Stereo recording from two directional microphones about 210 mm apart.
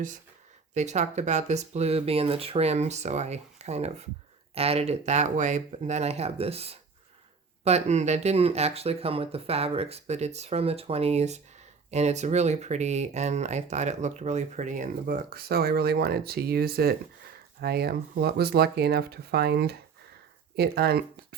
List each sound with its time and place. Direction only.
0.7 s speech: 35° right (ahead or behind); by 21.3 s 50° right (ahead or behind)